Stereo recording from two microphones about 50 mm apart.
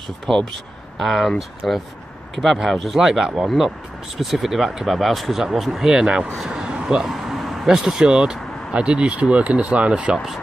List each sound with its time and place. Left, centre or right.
0.9 s speech: centre; by 10.1 s right
10.1 s speech: centre